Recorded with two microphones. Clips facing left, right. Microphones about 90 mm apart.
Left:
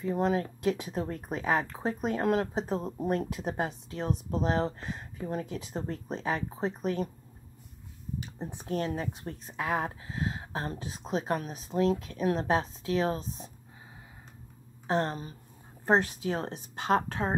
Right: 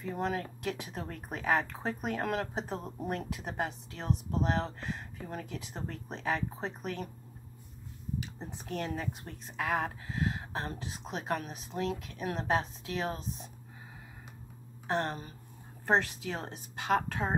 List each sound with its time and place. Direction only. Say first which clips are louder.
0.2 s a woman's voice: left 5 dB; 30° left (ahead or behind)
8.6 s a woman's voice: left 4 dB; 25° left (ahead or behind)
14.9 s speech: left 3 dB; 25° left (ahead or behind)
16.4 s speech: left 3 dB; 30° left (ahead or behind)